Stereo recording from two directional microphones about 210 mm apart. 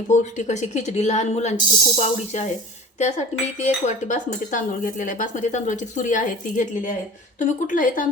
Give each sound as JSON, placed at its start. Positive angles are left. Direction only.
{"t": 0.1, "sound": "cutlery", "side_deg": 35}